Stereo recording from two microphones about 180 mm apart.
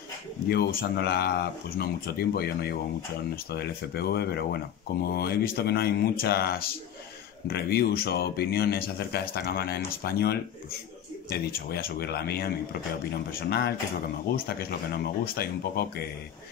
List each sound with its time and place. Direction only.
0.5 s speech: 60° left (ahead or behind)